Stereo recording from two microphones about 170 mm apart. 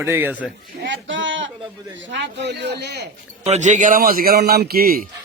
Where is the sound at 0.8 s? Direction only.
90° right.